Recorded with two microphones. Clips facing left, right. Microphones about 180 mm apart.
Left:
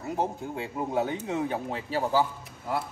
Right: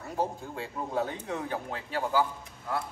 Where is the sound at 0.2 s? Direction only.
20° left (ahead or behind).